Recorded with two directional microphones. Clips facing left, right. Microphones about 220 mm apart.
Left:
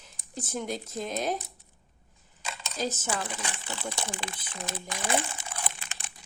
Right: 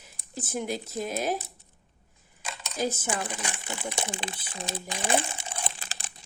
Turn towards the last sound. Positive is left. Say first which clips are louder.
# right 2 dB
turn(degrees=-35)  # may be behind; listen again after turning